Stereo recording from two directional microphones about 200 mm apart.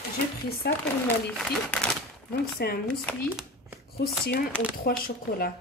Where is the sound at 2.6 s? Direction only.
55° left (ahead or behind).